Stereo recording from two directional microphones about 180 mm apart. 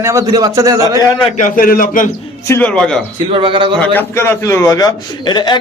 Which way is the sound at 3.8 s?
10° left (ahead or behind).